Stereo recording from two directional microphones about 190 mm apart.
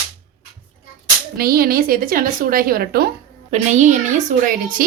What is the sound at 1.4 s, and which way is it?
A woman's voice, 50° right (ahead or behind).